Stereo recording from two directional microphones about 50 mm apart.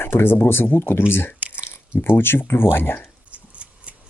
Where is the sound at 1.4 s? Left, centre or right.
Right.